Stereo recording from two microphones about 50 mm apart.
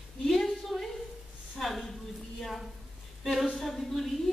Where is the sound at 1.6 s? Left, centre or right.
Centre.